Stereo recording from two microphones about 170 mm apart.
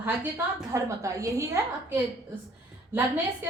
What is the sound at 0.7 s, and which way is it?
Speech, 20° right (ahead or behind).